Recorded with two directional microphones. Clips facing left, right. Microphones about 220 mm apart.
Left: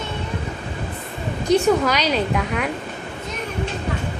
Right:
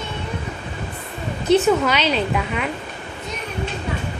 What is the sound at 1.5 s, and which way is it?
Speech, 15° left (ahead or behind).